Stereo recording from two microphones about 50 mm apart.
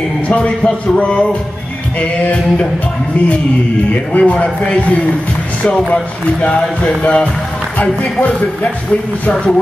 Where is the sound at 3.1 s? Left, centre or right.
Left.